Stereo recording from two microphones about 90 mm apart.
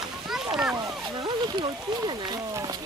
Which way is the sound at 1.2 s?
60° right (ahead or behind).